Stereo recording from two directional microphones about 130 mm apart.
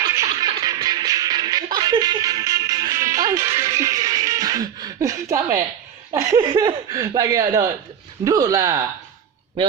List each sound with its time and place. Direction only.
0.2 s music: 30° right (ahead or behind)
6.4 s speech: 35° right (ahead or behind)